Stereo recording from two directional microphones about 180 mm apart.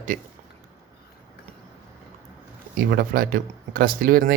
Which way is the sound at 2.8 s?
55° right (ahead or behind).